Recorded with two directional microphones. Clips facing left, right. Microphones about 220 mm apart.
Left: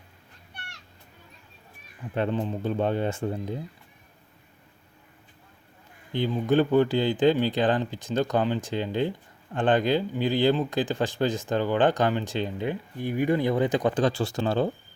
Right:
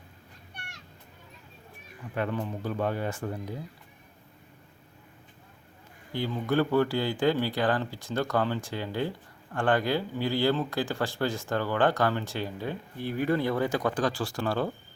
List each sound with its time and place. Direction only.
2.1 s speech: 25° left (ahead or behind)
6.1 s speech: 20° left (ahead or behind)